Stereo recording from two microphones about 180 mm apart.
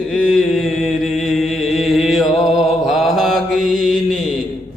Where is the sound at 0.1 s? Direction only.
Centre (ahead or behind).